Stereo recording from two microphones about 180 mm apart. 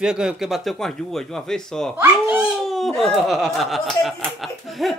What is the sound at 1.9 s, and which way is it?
Dog, 10° right (ahead or behind).